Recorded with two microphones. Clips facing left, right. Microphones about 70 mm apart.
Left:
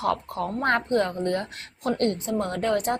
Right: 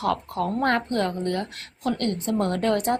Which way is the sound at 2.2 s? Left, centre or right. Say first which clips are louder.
Right 2 dB; centre.